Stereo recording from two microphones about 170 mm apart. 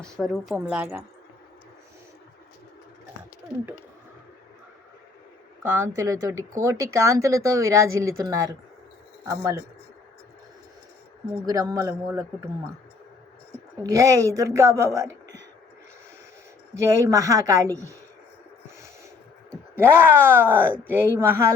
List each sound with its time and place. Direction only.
0.0 s a woman's voice: centre (ahead or behind)
5.6 s speech: 15° right (ahead or behind)
11.4 s speech: 20° right (ahead or behind)
13.8 s speech: 20° right (ahead or behind)
16.7 s speech: 20° right (ahead or behind)
19.7 s speech: 15° right (ahead or behind)